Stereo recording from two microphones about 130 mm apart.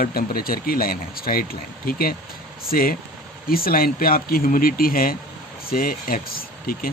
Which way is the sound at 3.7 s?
90° left.